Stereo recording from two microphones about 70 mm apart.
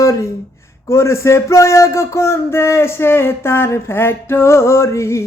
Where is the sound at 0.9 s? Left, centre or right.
Left.